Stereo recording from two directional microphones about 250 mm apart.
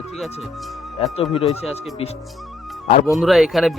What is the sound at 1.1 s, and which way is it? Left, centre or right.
Speech, left.